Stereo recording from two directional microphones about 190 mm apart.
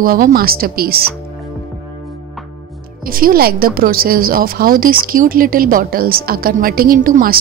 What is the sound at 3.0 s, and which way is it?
A woman's voice, 50° right (ahead or behind).